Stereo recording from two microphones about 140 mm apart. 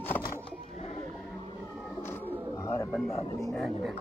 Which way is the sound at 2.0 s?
20° left (ahead or behind).